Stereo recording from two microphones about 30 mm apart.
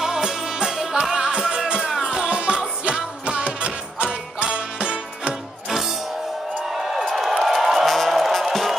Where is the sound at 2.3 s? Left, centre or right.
Right.